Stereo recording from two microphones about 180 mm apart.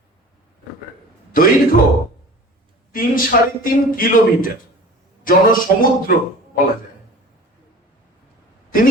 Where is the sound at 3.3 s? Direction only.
55° left (ahead or behind).